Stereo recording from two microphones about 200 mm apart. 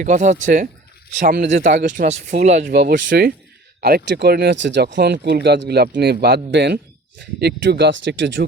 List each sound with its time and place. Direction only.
0.0 s speech: 35° right (ahead or behind); by 8.4 s 65° right (ahead or behind)